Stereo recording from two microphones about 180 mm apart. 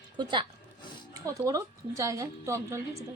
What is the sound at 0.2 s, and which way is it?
A woman's voice, 25° right (ahead or behind).